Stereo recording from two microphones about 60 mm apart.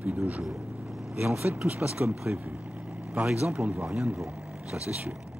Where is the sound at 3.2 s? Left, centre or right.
Right.